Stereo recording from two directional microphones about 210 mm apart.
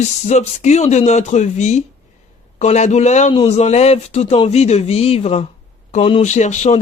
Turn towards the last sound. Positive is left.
turn(degrees=35)  # may be behind; listen again after turning